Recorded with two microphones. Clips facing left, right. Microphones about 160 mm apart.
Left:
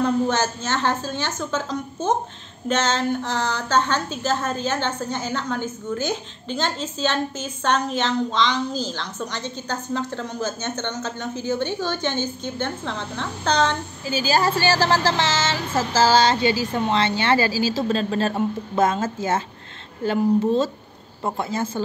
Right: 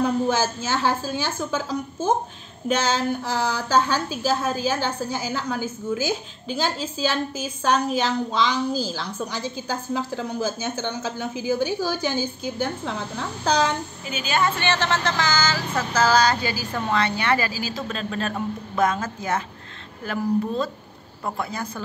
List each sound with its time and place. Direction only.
0.0 s a woman's voice: 10° right (ahead or behind)
14.0 s speech: 35° left (ahead or behind)